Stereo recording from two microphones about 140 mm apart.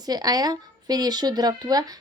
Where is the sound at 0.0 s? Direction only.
30° right (ahead or behind).